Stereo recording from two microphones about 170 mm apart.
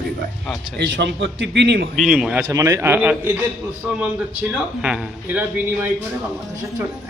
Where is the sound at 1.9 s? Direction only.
Centre (ahead or behind).